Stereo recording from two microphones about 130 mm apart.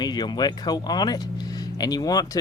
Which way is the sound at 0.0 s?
35° left (ahead or behind).